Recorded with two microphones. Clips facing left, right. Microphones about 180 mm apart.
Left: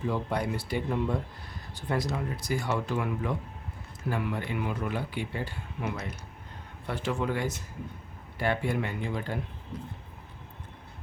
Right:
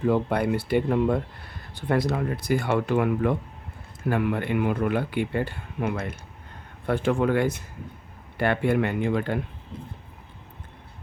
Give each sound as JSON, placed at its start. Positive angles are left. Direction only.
{"t": 0.0, "sound": "speech", "side_deg": -60}